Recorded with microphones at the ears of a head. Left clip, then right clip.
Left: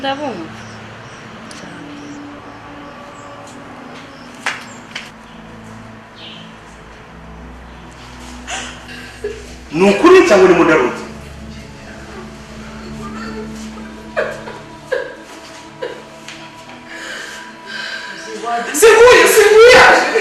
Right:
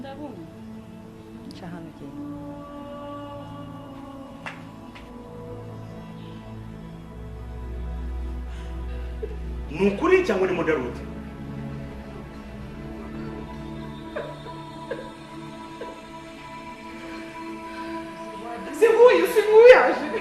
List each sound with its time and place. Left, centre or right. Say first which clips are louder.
0.0 s speech: left 17 dB; left
9.2 s a man's voice: left 10 dB; left
12.9 s music: left 9 dB; left
17.7 s music: left 13 dB; left